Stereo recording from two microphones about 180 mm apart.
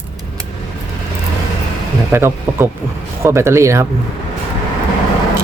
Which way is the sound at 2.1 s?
15° right (ahead or behind).